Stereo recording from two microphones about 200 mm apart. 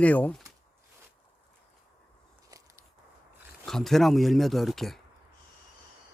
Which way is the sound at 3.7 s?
Centre (ahead or behind).